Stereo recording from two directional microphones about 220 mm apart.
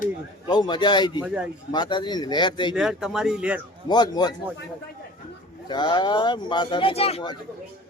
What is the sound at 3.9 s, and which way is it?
Speech, 20° left (ahead or behind).